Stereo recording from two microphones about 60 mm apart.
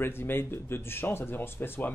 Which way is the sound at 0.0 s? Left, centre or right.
Left.